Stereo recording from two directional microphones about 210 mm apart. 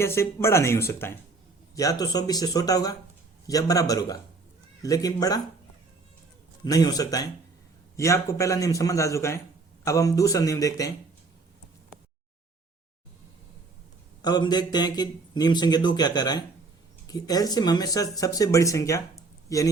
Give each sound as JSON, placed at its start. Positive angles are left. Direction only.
{"t": 0.0, "sound": "speech", "side_deg": 10}
{"t": 6.7, "sound": "speech", "side_deg": 15}
{"t": 14.2, "sound": "speech", "side_deg": 20}